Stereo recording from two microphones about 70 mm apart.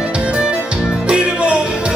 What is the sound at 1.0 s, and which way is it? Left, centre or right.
Music, centre.